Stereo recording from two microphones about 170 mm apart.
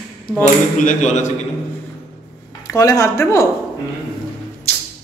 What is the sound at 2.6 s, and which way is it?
Speech, 20° left (ahead or behind).